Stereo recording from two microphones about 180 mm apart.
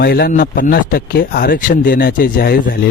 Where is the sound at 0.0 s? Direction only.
60° left (ahead or behind).